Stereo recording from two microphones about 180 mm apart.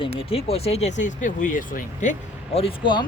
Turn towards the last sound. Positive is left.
turn(degrees=30)  # may be behind; listen again after turning